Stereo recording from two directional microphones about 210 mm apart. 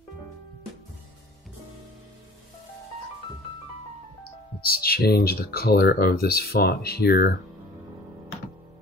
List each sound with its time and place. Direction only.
4.7 s speech: 45° left (ahead or behind)